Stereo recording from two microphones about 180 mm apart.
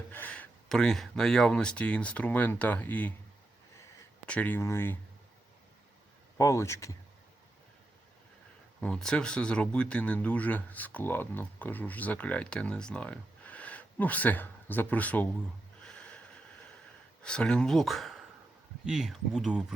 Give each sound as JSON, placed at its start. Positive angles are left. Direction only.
{"t": 0.1, "sound": "speech", "side_deg": 10}
{"t": 4.3, "sound": "speech", "side_deg": 10}
{"t": 6.3, "sound": "speech", "side_deg": 15}
{"t": 8.8, "sound": "speech", "side_deg": 5}
{"t": 15.8, "sound": "snort", "side_deg": 5}
{"t": 17.2, "sound": "speech", "side_deg": 5}